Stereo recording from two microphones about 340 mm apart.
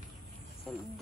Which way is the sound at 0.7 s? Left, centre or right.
Centre.